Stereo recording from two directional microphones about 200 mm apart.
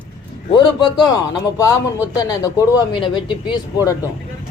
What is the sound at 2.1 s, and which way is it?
Speech, 20° left (ahead or behind).